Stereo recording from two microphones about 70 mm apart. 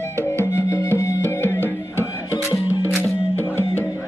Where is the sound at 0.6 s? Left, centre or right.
Left.